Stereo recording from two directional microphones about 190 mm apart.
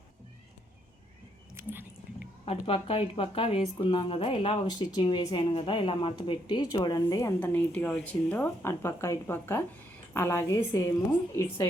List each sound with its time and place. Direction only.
1.5 s chewing: 10° right (ahead or behind)
2.4 s a woman's voice: 30° left (ahead or behind); by 11.7 s 15° left (ahead or behind)